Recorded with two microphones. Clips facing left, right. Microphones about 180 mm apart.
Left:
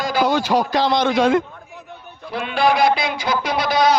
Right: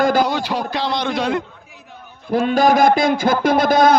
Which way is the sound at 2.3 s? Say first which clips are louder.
Right 4 dB; 45° right (ahead or behind).